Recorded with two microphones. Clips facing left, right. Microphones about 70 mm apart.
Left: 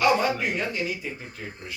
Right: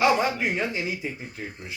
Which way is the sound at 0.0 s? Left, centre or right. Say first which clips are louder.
Even; right.